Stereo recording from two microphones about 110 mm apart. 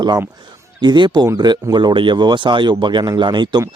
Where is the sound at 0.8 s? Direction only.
40° right (ahead or behind).